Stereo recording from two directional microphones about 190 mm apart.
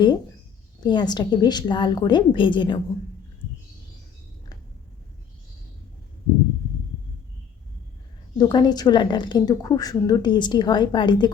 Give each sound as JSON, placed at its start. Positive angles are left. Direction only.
{"t": 0.8, "sound": "a woman's voice", "side_deg": 25}
{"t": 8.4, "sound": "a woman's voice", "side_deg": 20}